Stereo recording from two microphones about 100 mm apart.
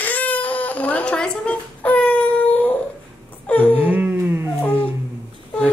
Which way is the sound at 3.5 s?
15° left (ahead or behind).